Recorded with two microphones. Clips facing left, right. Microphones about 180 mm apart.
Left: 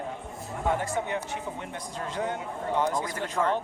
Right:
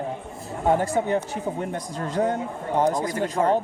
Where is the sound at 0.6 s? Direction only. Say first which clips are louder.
Right 7 dB; 35° right (ahead or behind).